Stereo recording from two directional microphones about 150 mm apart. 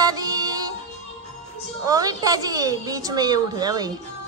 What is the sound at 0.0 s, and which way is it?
Music, 25° right (ahead or behind).